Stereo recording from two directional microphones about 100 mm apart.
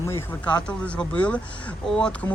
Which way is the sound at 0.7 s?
10° left (ahead or behind).